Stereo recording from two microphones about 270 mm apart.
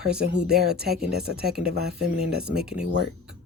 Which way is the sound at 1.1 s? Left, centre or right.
Right.